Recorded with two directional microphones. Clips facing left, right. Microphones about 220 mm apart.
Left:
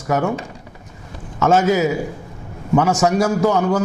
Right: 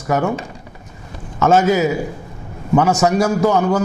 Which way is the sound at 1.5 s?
10° right (ahead or behind).